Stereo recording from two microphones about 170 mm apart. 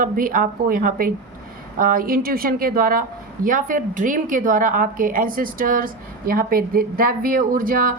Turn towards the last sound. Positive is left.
turn(degrees=-55)  # may be behind; listen again after turning